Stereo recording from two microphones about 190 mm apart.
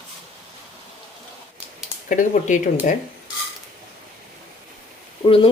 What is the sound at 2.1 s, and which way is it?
Speech, 40° left (ahead or behind).